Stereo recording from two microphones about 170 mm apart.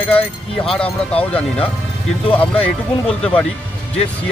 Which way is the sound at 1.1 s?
5° left (ahead or behind).